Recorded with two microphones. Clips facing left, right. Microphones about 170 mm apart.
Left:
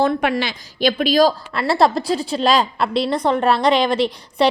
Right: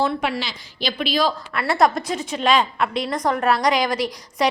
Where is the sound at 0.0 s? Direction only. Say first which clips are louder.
Left 4 dB; 55° left (ahead or behind).